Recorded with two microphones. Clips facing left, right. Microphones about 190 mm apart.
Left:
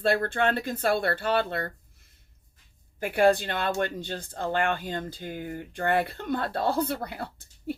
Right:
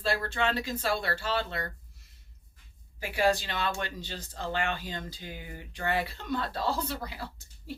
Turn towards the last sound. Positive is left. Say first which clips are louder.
# left 7 dB
turn(degrees=55)  # may be behind; listen again after turning